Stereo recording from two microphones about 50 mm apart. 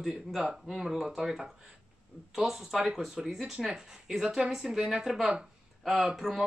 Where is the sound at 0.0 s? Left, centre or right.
Centre.